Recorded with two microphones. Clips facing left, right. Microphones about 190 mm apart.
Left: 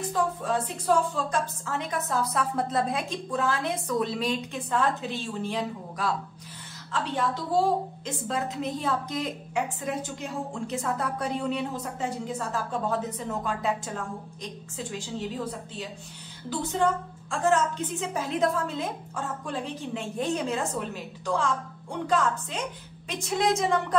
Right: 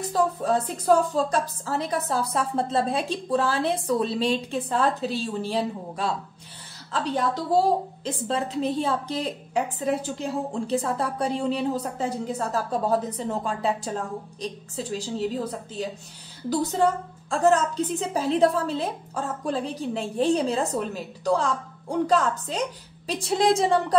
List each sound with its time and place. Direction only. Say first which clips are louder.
0.1 s a woman's voice: right 5 dB; 40° right (ahead or behind)
16.4 s a woman's voice: right 4 dB; 35° right (ahead or behind)